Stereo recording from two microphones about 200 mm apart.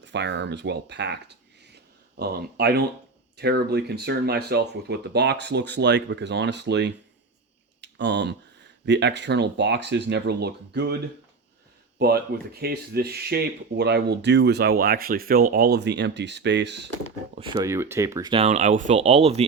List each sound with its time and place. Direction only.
0.0 s speech: 60° right (ahead or behind)
7.8 s a sound: 60° right (ahead or behind)
8.9 s speech: 60° right (ahead or behind)
11.9 s speech: 50° right (ahead or behind)
17.3 s speech: 25° right (ahead or behind)